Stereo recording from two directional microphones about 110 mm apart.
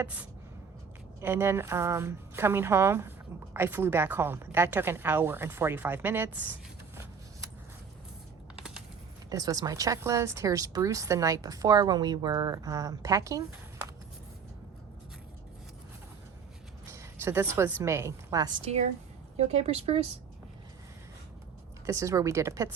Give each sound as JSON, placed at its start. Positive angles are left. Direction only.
{"t": 0.0, "sound": "a sound", "side_deg": -15}
{"t": 1.2, "sound": "a woman's voice", "side_deg": -20}
{"t": 9.3, "sound": "speech", "side_deg": -30}
{"t": 16.8, "sound": "a woman's voice", "side_deg": -25}
{"t": 18.6, "sound": "speech", "side_deg": -75}
{"t": 21.8, "sound": "a woman's voice", "side_deg": -30}